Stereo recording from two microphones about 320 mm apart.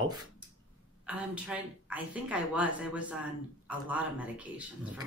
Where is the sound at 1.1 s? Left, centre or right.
Centre.